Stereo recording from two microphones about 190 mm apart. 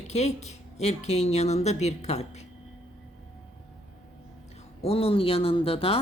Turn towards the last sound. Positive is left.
turn(degrees=30)  # may be behind; listen again after turning